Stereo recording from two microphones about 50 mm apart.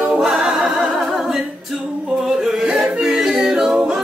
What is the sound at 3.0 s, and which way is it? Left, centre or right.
A capella, centre.